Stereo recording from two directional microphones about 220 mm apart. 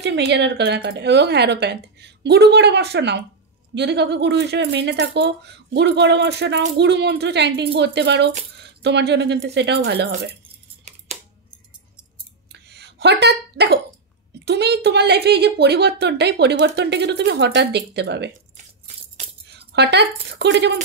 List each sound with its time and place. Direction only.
0.0 s speech: 50° right (ahead or behind)
12.5 s a sound: 50° right (ahead or behind)
14.4 s speech: 50° right (ahead or behind)
19.4 s speech: 50° right (ahead or behind)